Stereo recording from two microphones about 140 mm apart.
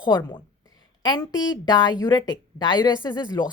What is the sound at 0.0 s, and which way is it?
A woman's voice, 30° left (ahead or behind).